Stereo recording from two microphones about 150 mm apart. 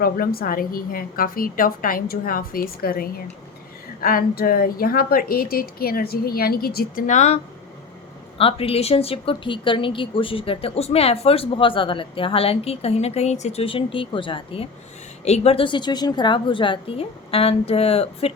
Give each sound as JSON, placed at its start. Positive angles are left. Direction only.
{"t": 0.0, "sound": "a woman's voice", "side_deg": 90}
{"t": 7.1, "sound": "speech", "side_deg": 50}
{"t": 8.4, "sound": "speech", "side_deg": 40}